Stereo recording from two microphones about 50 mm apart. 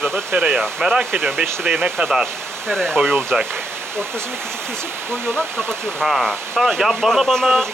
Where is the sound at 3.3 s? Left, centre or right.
Right.